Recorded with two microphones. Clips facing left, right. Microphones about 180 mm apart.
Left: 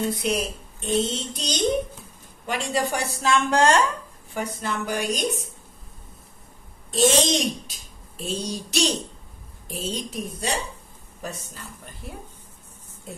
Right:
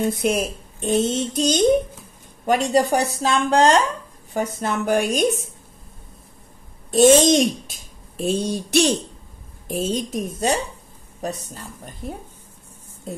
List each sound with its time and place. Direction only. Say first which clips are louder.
0.0 s speech: right 4 dB; 50° right (ahead or behind)
2.7 s speech: right 7 dB; 40° right (ahead or behind); by 5.5 s 55° right (ahead or behind)
6.9 s speech: right 7 dB; 50° right (ahead or behind)
11.1 s speech: right 6 dB; 35° right (ahead or behind)